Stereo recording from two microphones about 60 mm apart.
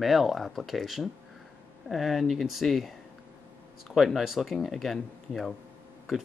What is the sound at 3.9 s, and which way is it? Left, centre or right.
Speech, centre.